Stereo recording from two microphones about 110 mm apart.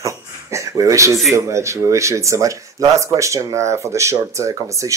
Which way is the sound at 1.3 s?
25° right (ahead or behind).